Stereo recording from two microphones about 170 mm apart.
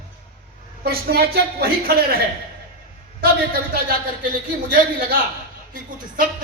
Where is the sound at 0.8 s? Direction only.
65° right (ahead or behind).